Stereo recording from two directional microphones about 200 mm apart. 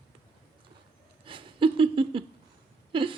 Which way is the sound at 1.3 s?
25° right (ahead or behind).